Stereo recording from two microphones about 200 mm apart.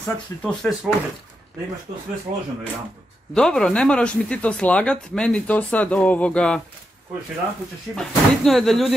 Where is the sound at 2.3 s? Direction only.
40° right (ahead or behind).